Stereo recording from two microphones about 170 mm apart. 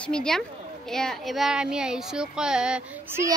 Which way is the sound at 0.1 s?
5° left (ahead or behind).